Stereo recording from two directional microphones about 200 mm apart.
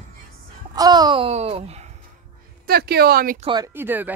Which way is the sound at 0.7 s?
20° right (ahead or behind).